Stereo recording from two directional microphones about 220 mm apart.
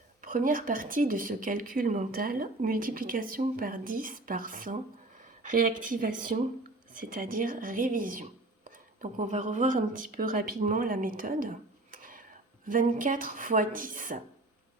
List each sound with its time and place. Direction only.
0.2 s speech: 40° right (ahead or behind)